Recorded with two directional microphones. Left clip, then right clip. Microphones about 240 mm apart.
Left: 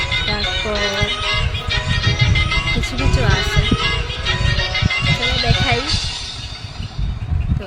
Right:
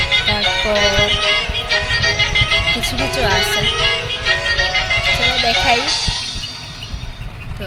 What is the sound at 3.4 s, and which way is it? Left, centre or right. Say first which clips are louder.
Music: right 3 dB; left.